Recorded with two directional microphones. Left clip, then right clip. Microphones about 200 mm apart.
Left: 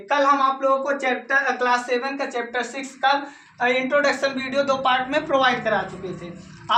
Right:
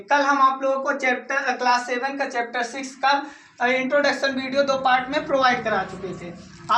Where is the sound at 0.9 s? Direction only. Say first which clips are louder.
Even; 10° left (ahead or behind).